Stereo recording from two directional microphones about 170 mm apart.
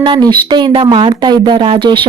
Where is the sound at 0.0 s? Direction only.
25° right (ahead or behind).